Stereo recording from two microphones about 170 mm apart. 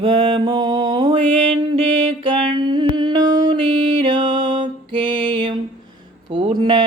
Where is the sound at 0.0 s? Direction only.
30° right (ahead or behind).